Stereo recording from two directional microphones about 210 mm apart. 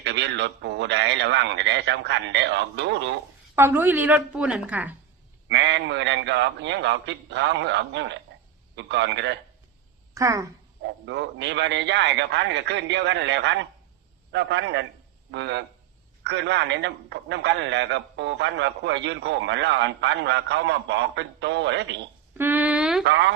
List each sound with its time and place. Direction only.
0.0 s speech: 55° right (ahead or behind)
3.5 s a woman's voice: 10° right (ahead or behind)
5.5 s speech: 55° right (ahead or behind)
10.2 s a woman's voice: 15° right (ahead or behind)
10.8 s speech: 55° right (ahead or behind)
22.4 s a sound: 10° right (ahead or behind)
23.0 s speech: 55° right (ahead or behind)